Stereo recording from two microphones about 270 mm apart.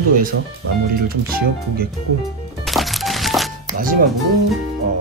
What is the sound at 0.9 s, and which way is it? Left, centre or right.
Speech, right.